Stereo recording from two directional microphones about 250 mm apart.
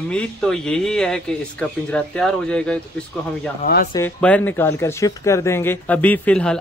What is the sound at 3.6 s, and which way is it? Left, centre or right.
Speech, left.